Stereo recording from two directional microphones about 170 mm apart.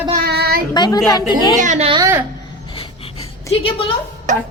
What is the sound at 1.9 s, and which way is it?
Speech, 25° right (ahead or behind).